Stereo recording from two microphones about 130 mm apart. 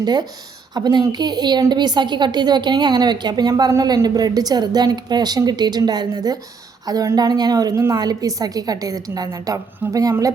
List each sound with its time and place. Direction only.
0.0 s a woman's voice: 30° right (ahead or behind)